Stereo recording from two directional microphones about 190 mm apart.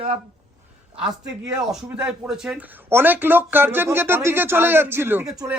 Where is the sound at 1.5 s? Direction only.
5° right (ahead or behind).